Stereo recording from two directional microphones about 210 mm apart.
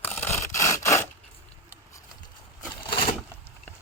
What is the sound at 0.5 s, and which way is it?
Sawing, 15° left (ahead or behind).